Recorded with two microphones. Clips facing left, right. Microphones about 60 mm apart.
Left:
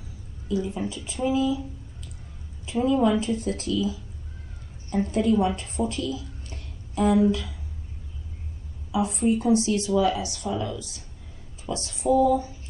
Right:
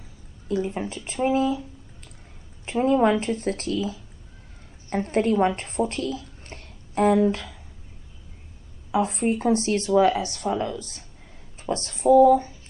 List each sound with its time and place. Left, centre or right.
0.5 s a woman's voice: right
2.6 s a woman's voice: right
8.9 s a woman's voice: right